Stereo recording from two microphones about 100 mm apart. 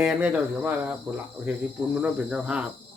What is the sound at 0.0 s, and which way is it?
Cricket, 5° right (ahead or behind).